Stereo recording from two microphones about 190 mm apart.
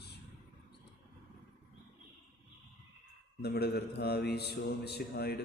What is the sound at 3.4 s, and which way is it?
Mantra, 60° left (ahead or behind).